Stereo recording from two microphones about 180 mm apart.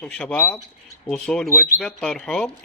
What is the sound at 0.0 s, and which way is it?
A man's voice, 5° left (ahead or behind).